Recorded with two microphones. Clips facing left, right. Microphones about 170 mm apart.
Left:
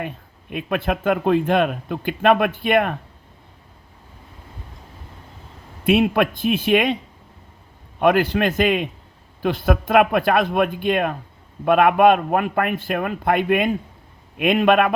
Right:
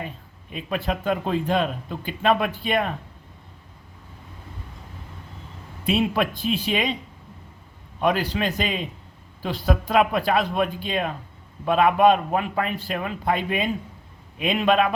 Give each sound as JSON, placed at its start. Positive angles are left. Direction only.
{"t": 0.5, "sound": "speech", "side_deg": 60}
{"t": 5.8, "sound": "speech", "side_deg": 60}
{"t": 8.0, "sound": "speech", "side_deg": 55}